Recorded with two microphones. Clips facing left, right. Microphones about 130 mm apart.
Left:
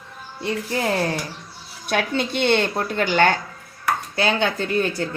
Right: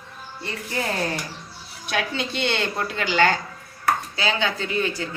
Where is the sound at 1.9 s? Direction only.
55° left (ahead or behind).